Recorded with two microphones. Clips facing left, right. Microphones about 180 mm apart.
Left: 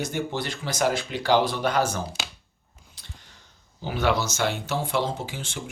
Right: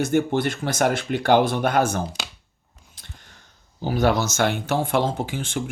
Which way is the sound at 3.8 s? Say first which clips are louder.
Right 4 dB; 40° right (ahead or behind).